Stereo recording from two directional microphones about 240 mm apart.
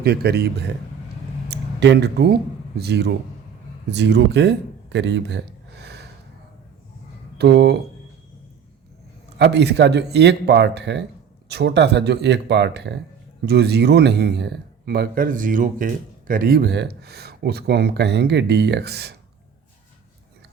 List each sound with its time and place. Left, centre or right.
0.0 s speech: right
5.8 s a sound: right
7.3 s speech: right
9.4 s speech: right